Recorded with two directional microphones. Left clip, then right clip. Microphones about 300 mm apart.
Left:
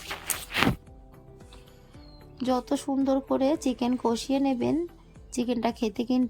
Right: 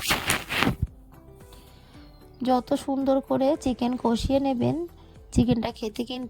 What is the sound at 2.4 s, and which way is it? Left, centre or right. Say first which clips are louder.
Speech: right 3 dB; right.